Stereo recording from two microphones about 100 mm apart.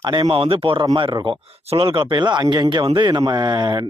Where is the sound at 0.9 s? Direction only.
50° right (ahead or behind).